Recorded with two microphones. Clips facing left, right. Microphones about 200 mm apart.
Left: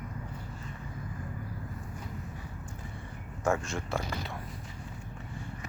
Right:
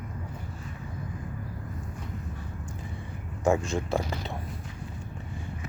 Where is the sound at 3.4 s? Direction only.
15° right (ahead or behind).